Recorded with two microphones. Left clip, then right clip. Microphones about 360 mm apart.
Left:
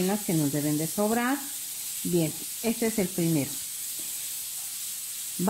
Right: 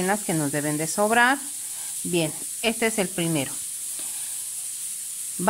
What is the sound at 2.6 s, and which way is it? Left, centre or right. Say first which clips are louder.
Sizzle: right 5 dB; right.